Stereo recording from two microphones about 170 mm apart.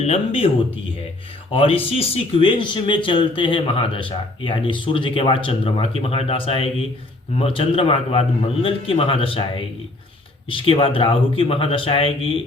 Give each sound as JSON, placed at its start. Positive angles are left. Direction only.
{"t": 0.0, "sound": "speech", "side_deg": 35}
{"t": 1.5, "sound": "speech", "side_deg": 35}